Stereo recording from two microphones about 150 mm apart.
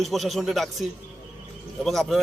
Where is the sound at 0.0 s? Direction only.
Centre (ahead or behind).